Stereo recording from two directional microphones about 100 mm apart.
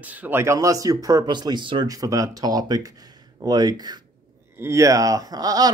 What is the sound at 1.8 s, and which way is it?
Speech, 35° right (ahead or behind).